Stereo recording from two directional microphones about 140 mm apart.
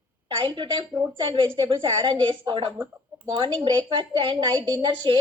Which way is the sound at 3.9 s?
40° right (ahead or behind).